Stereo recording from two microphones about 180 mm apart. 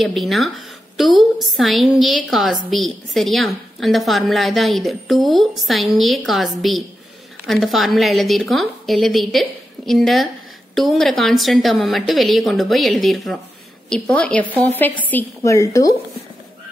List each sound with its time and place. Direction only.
0.0 s a woman's voice: centre (ahead or behind); by 16.0 s 20° left (ahead or behind)